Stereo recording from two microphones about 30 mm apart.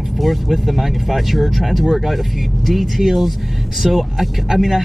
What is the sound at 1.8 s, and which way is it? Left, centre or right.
Speech, centre.